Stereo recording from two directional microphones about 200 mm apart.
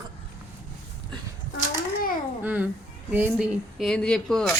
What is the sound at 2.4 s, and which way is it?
A child's voice, 10° right (ahead or behind).